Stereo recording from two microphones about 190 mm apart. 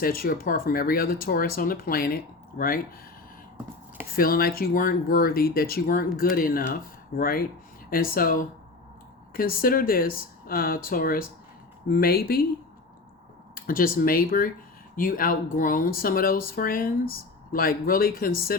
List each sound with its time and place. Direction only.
0.0 s speech: 50° left (ahead or behind)
4.1 s speech: 50° left (ahead or behind)
13.6 s speech: 50° left (ahead or behind)